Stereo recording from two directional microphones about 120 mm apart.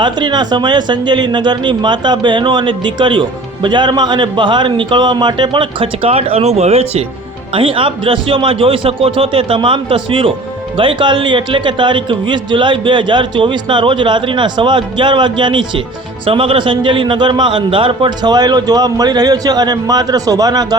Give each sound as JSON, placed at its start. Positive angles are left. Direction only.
{"t": 0.0, "sound": "speech", "side_deg": -40}
{"t": 7.5, "sound": "a man's voice", "side_deg": -50}